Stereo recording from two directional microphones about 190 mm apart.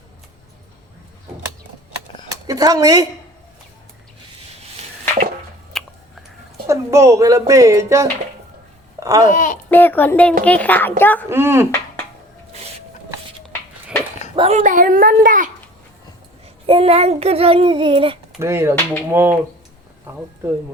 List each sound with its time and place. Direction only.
2.5 s speech: 20° right (ahead or behind)
5.7 s a sound: centre (ahead or behind)
6.7 s a woman's voice: 15° right (ahead or behind)
9.0 s babbling: 15° right (ahead or behind)
9.3 s a child's voice: 40° left (ahead or behind)
9.6 s speech: 10° left (ahead or behind)
11.3 s speech: 15° right (ahead or behind)
14.3 s a child's voice: 35° right (ahead or behind)
16.6 s child singing: 30° right (ahead or behind)
18.3 s speech: 15° right (ahead or behind)